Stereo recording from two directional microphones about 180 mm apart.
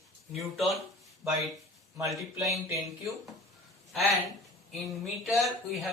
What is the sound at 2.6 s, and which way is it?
Speech, 15° right (ahead or behind).